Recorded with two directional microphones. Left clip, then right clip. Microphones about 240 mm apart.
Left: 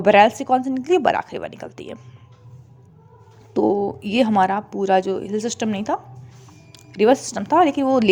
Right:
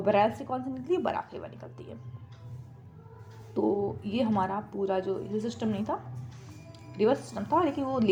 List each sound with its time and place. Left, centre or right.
0.0 s speech: left
3.5 s speech: left